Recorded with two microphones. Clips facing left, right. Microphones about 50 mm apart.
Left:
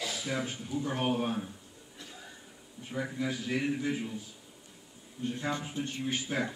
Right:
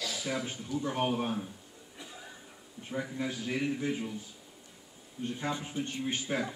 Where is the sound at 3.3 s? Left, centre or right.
Centre.